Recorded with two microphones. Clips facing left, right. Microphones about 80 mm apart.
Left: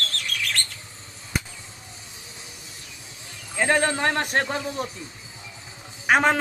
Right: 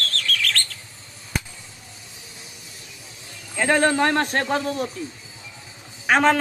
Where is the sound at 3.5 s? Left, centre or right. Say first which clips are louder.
Right 3 dB; centre.